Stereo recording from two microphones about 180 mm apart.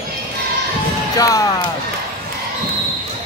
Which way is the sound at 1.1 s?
20° left (ahead or behind).